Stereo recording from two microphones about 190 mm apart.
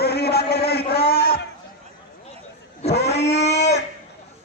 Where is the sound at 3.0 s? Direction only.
35° left (ahead or behind).